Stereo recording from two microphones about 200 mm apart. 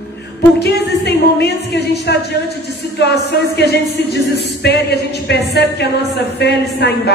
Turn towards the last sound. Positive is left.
turn(degrees=55)  # may be behind; listen again after turning